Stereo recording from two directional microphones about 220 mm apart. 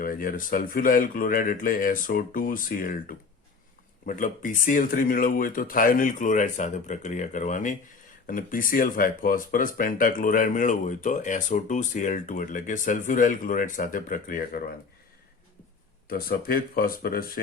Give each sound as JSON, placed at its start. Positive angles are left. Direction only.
{"t": 0.0, "sound": "speech", "side_deg": 40}
{"t": 16.0, "sound": "speech", "side_deg": 40}